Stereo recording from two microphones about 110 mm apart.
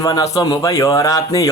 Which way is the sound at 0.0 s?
35° left (ahead or behind).